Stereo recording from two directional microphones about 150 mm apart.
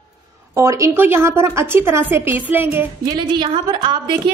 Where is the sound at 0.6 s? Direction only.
20° right (ahead or behind).